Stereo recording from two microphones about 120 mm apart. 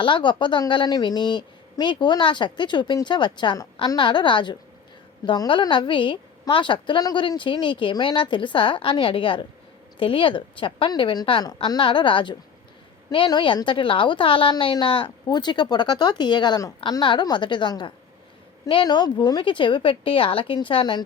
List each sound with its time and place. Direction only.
0.0 s a woman's voice: 40° left (ahead or behind)
11.8 s a woman's voice: 45° left (ahead or behind)